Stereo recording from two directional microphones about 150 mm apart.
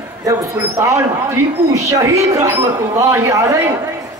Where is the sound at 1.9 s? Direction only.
20° right (ahead or behind).